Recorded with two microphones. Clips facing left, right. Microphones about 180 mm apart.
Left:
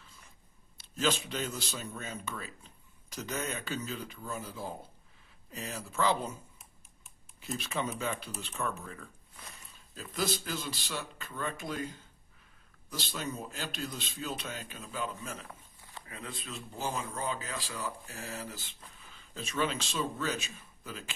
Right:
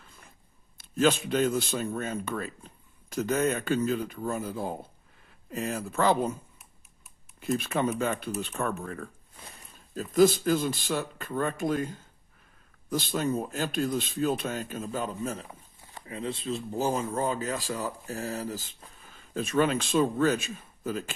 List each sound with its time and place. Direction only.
0.0 s a sound: 55° right (ahead or behind)
0.7 s speech: 55° right (ahead or behind)
7.3 s speech: 55° right (ahead or behind); by 15.4 s 40° right (ahead or behind)
16.1 s speech: 25° right (ahead or behind); by 21.1 s 45° right (ahead or behind)